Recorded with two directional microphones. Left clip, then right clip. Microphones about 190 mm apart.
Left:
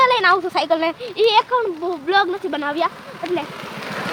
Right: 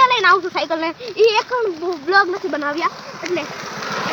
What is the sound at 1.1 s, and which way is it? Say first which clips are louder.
Speech: even; 10° left (ahead or behind).